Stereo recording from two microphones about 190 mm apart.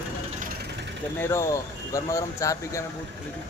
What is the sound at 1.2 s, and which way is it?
Speech, 15° left (ahead or behind).